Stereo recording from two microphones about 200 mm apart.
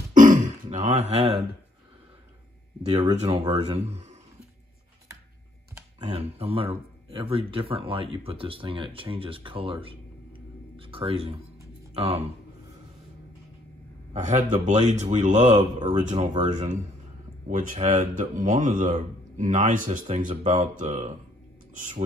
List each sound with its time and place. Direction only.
0.1 s throat clearing: 40° right (ahead or behind)
2.8 s a man's voice: 30° right (ahead or behind)
5.9 s speech: 30° right (ahead or behind)
14.1 s a man's voice: 40° right (ahead or behind)